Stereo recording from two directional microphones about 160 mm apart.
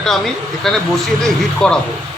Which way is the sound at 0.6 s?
Centre (ahead or behind).